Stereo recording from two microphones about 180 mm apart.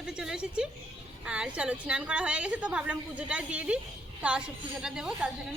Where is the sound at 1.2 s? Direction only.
5° right (ahead or behind).